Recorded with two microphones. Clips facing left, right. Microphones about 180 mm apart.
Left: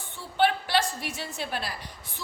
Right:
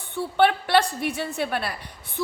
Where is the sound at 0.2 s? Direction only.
60° right (ahead or behind).